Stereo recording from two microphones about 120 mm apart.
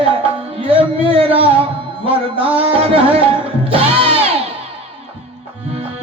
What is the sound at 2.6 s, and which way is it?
Music, 55° right (ahead or behind).